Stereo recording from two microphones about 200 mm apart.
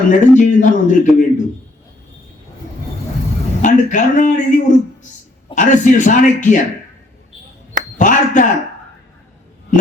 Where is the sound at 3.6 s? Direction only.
40° left (ahead or behind).